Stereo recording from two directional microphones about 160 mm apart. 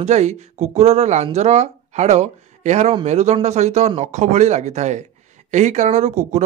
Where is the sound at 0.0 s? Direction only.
45° right (ahead or behind).